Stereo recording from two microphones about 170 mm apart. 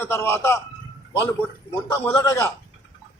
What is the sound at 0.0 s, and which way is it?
Speech, 15° left (ahead or behind).